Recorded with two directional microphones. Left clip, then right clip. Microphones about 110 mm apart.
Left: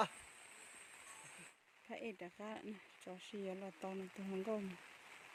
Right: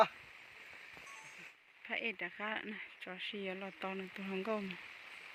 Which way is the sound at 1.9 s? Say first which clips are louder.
Right 10 dB; 25° left (ahead or behind).